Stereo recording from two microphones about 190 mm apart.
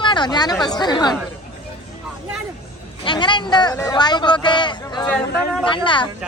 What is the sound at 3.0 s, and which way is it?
Speech, 25° left (ahead or behind).